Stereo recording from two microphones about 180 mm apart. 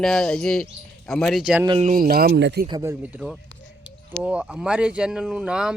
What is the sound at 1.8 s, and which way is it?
Speech, 50° right (ahead or behind).